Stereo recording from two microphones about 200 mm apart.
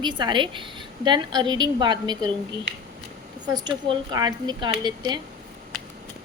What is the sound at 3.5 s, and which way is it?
A woman's voice, 20° right (ahead or behind).